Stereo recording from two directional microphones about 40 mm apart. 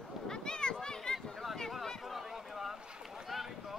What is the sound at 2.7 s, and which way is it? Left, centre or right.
Boat, centre.